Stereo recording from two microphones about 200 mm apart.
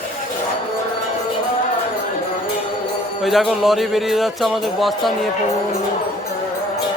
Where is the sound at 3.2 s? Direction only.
Centre (ahead or behind).